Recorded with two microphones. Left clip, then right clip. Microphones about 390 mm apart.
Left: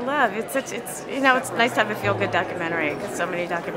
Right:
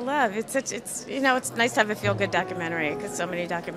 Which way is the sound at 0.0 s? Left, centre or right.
Right.